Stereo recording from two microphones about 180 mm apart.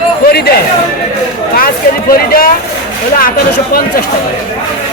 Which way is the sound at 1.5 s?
55° left (ahead or behind).